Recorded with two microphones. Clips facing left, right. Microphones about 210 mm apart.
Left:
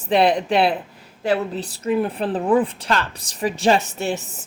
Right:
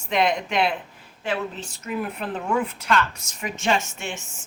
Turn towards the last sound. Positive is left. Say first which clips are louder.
# left 9 dB
turn(degrees=35)  # may be behind; listen again after turning